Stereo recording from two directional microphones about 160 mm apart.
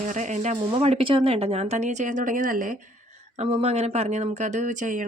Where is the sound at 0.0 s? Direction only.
50° right (ahead or behind).